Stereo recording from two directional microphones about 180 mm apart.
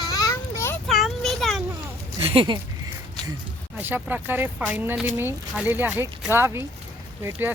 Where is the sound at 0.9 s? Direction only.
Centre (ahead or behind).